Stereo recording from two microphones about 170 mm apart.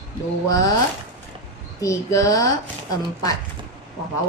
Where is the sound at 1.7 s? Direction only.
20° left (ahead or behind).